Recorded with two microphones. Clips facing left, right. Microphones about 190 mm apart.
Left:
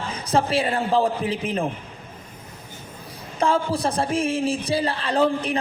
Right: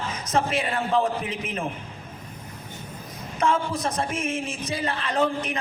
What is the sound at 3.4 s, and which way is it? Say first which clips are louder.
A man's voice: left 3 dB; 30° left (ahead or behind).